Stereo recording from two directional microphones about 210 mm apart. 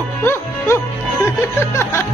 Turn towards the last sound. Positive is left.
turn(degrees=10)  # may be behind; listen again after turning